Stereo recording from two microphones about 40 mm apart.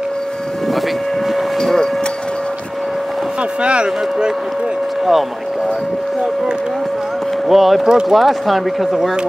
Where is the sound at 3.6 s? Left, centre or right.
Right.